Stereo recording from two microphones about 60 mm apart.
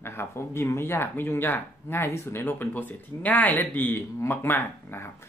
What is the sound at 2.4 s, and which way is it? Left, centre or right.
Speech, left.